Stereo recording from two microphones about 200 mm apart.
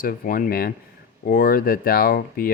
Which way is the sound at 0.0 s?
45° left (ahead or behind).